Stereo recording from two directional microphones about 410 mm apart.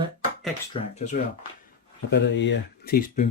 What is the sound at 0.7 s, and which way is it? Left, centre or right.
Speech, centre.